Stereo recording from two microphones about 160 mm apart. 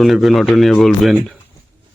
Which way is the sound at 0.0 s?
Centre (ahead or behind).